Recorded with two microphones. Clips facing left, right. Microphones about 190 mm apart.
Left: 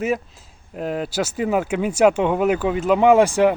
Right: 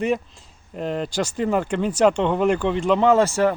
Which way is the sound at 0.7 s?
5° left (ahead or behind).